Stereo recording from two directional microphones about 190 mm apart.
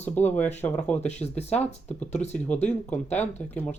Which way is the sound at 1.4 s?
35° left (ahead or behind).